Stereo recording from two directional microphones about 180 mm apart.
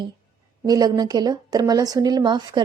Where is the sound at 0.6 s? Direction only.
20° right (ahead or behind).